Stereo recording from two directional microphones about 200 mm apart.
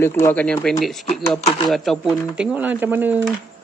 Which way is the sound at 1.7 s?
Centre (ahead or behind).